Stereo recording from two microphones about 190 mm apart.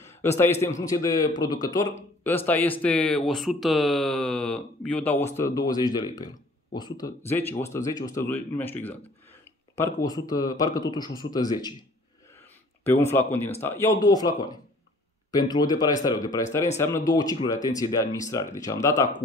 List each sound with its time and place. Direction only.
0.0 s a man's voice: 15° left (ahead or behind)
12.8 s a man's voice: 15° left (ahead or behind)